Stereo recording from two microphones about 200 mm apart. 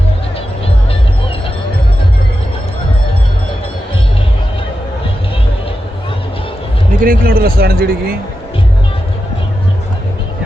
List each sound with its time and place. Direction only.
7.0 s speech: 45° right (ahead or behind)